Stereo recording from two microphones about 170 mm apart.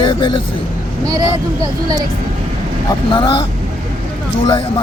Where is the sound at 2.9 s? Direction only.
30° left (ahead or behind).